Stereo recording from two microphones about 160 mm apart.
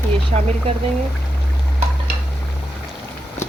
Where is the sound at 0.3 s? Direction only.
45° right (ahead or behind).